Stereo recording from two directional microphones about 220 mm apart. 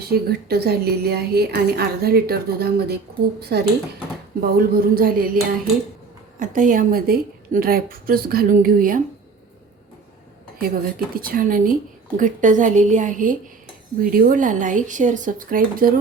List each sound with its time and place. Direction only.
0.1 s a woman's voice: 45° right (ahead or behind)
11.1 s a woman's voice: 40° right (ahead or behind)